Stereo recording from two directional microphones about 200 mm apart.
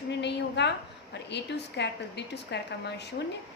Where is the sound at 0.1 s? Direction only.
60° left (ahead or behind).